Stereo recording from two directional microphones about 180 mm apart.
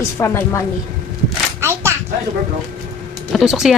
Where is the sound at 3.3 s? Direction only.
Centre (ahead or behind).